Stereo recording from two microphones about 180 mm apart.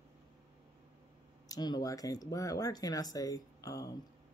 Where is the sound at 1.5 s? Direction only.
20° left (ahead or behind).